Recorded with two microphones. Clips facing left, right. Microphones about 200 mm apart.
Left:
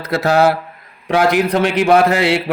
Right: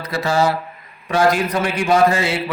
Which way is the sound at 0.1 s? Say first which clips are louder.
Left 5 dB; 65° left (ahead or behind).